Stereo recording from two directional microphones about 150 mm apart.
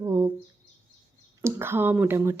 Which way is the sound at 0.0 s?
20° right (ahead or behind).